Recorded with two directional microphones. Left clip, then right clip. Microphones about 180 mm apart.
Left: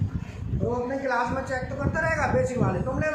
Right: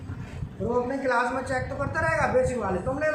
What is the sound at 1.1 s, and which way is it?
Speech, 15° right (ahead or behind).